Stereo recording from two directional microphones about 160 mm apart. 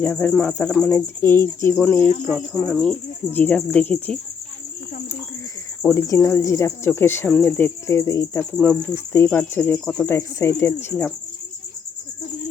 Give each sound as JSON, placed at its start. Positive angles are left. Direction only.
{"t": 0.0, "sound": "speech", "side_deg": 10}
{"t": 2.8, "sound": "speech", "side_deg": 10}
{"t": 5.8, "sound": "speech", "side_deg": 15}
{"t": 8.5, "sound": "speech", "side_deg": 5}
{"t": 10.2, "sound": "speech", "side_deg": 15}